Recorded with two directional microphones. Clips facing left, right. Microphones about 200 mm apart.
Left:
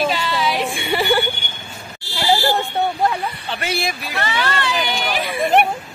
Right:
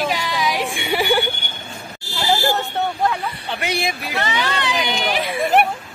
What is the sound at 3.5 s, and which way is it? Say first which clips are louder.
Speech: right 1 dB; 15° right (ahead or behind).